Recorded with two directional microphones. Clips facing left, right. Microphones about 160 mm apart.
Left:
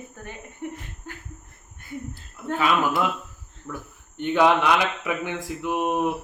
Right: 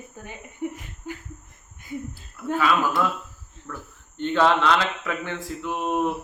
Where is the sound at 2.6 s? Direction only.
20° left (ahead or behind).